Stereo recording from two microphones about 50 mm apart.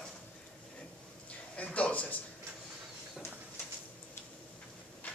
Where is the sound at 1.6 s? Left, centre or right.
Left.